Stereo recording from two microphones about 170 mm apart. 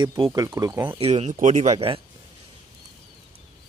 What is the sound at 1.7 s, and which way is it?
Speech, 35° right (ahead or behind).